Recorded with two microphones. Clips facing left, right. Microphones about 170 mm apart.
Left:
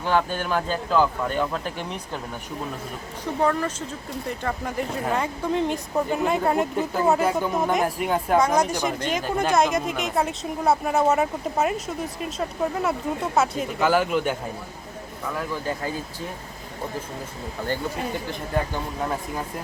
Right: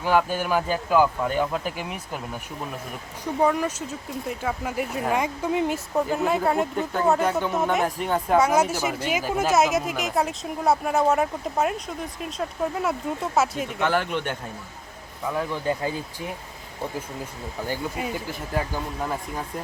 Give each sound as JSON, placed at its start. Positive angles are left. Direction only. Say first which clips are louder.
{"t": 0.0, "sound": "speech", "louder": "right 1 dB", "side_deg": -10}
{"t": 3.4, "sound": "speech", "louder": "right 1 dB", "side_deg": -10}
{"t": 8.0, "sound": "speech", "louder": "even", "side_deg": 10}
{"t": 8.4, "sound": "speech", "louder": "right 1 dB", "side_deg": -5}
{"t": 15.4, "sound": "speech", "louder": "right 3 dB", "side_deg": -20}
{"t": 17.7, "sound": "speech", "louder": "left 2 dB", "side_deg": -5}